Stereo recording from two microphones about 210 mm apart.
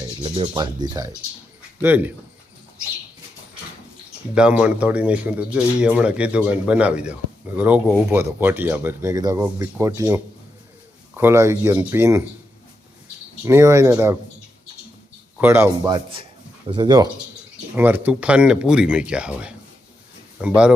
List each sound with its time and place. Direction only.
0.2 s speech: 20° right (ahead or behind)
4.4 s speech: 5° right (ahead or behind)
13.4 s speech: 15° right (ahead or behind)
15.4 s speech: 10° right (ahead or behind)
17.7 s speech: 10° right (ahead or behind)